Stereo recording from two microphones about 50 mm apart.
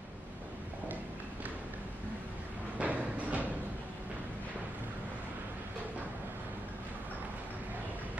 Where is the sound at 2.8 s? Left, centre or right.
Right.